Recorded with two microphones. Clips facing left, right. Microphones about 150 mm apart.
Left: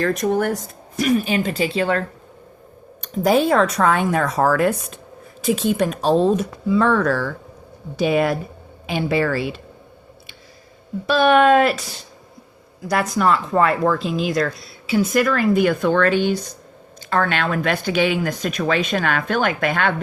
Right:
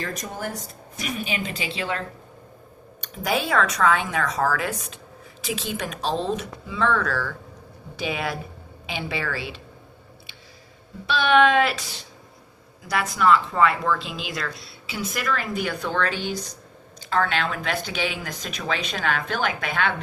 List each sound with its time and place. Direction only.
0.0 s speech: 65° left (ahead or behind)
0.9 s speech: 50° left (ahead or behind)
3.2 s speech: 45° left (ahead or behind)
11.0 s speech: 45° left (ahead or behind)
12.9 s speech: 45° left (ahead or behind)